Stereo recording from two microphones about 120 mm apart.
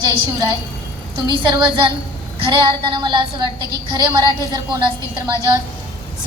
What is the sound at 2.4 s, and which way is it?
Child singing, 45° right (ahead or behind).